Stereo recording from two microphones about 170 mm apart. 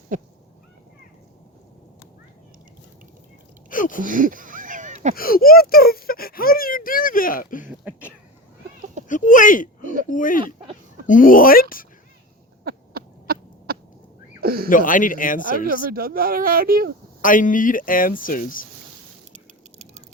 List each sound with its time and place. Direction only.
0.1 s dog: 50° right (ahead or behind)
3.7 s a sound: 50° left (ahead or behind)
4.0 s a sound: 50° right (ahead or behind)
5.1 s speech: 60° left (ahead or behind)
9.0 s speech: 50° left (ahead or behind)
12.6 s owl: 65° right (ahead or behind)
14.4 s a sound: 60° right (ahead or behind)
14.7 s speech: 50° left (ahead or behind)
15.9 s speech: 60° right (ahead or behind)
17.2 s speech: 50° left (ahead or behind)